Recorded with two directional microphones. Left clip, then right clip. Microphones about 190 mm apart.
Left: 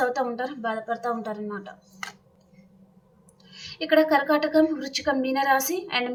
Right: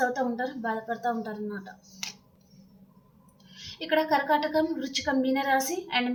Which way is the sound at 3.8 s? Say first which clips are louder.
Left 5 dB; 20° left (ahead or behind).